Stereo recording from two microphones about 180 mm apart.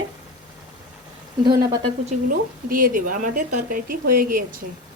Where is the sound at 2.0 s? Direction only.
50° right (ahead or behind).